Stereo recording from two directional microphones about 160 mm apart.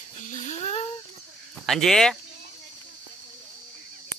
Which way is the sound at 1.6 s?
Centre (ahead or behind).